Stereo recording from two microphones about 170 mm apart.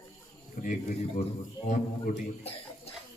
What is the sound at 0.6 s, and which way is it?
Speech, 50° left (ahead or behind).